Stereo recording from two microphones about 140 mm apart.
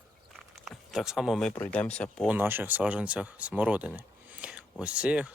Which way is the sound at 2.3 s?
15° right (ahead or behind).